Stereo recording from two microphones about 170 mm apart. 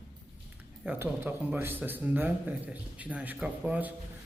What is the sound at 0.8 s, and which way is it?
Speech, 10° right (ahead or behind).